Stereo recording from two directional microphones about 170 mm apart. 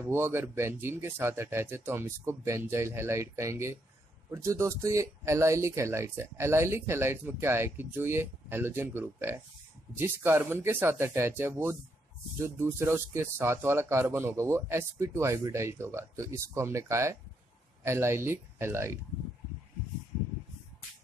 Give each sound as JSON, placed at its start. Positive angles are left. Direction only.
{"t": 0.1, "sound": "speech", "side_deg": -15}